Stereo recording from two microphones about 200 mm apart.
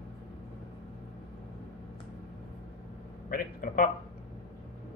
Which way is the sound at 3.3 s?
45° left (ahead or behind).